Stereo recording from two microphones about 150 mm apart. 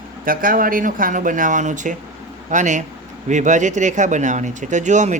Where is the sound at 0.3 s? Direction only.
70° right (ahead or behind).